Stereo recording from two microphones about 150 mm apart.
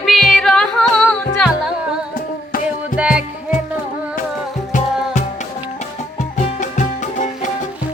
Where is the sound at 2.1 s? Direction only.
70° left (ahead or behind).